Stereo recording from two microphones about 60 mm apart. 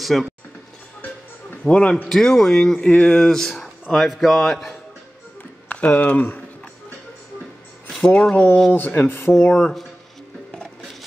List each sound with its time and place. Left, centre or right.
0.0 s speech: centre
1.6 s a man's voice: centre
2.0 s a man's voice: centre
5.7 s speech: left
8.1 s a man's voice: centre
8.7 s speech: left
9.5 s speech: centre